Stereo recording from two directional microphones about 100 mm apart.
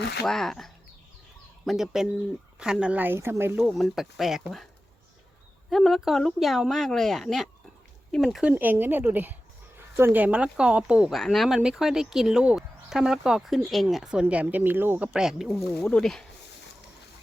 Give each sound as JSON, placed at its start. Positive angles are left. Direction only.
{"t": 0.3, "sound": "speech", "side_deg": 5}
{"t": 3.8, "sound": "speech", "side_deg": 0}
{"t": 5.7, "sound": "speech", "side_deg": 0}
{"t": 8.4, "sound": "a woman's voice", "side_deg": -20}
{"t": 11.1, "sound": "speech", "side_deg": 0}
{"t": 15.2, "sound": "speech", "side_deg": -5}
{"t": 15.7, "sound": "speech", "side_deg": 10}